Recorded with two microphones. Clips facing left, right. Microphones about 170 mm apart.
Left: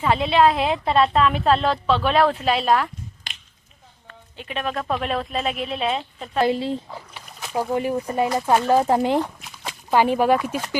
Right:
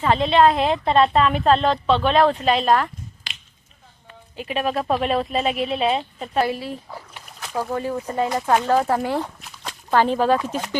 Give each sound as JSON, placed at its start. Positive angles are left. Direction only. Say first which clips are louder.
{"t": 0.0, "sound": "a woman's voice", "louder": "right 1 dB", "side_deg": 10}
{"t": 4.0, "sound": "a woman's voice", "louder": "right 5 dB", "side_deg": -10}
{"t": 6.4, "sound": "speech", "louder": "left 4 dB", "side_deg": 25}
{"t": 7.3, "sound": "speech", "louder": "left 2 dB", "side_deg": 5}